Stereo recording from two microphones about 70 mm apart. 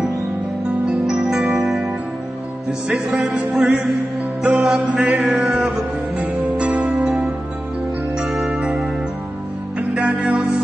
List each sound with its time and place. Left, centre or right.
0.8 s music: centre
2.9 s music: centre
8.4 s music: centre